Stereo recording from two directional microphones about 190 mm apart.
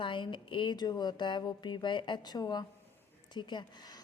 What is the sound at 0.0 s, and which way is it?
A woman's voice, 25° left (ahead or behind).